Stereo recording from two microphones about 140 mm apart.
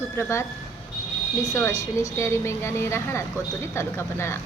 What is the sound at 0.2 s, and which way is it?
Speech, 20° left (ahead or behind).